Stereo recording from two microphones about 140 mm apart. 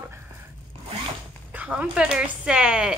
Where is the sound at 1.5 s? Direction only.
10° right (ahead or behind).